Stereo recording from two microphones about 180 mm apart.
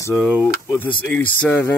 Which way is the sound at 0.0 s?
10° left (ahead or behind).